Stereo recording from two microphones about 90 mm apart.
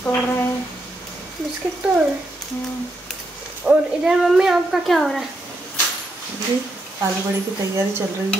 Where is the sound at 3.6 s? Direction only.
5° right (ahead or behind).